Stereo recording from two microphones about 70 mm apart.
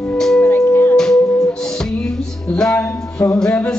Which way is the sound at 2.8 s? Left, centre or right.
Left.